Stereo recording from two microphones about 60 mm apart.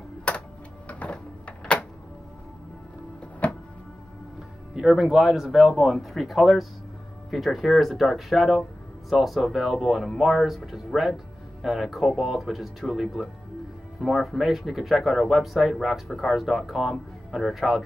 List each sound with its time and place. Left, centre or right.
0.3 s tick-tock: left
0.8 s printer: left
3.4 s music: left
4.7 s speech: centre